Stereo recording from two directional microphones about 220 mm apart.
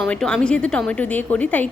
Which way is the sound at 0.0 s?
5° left (ahead or behind).